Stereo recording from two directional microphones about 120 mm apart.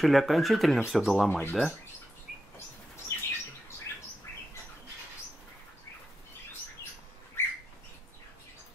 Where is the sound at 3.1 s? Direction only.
25° left (ahead or behind).